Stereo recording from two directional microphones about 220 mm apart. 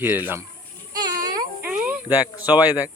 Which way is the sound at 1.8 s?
10° right (ahead or behind).